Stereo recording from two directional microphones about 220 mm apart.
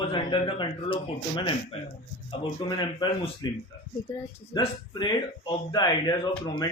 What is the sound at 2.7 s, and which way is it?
Speech, 20° left (ahead or behind).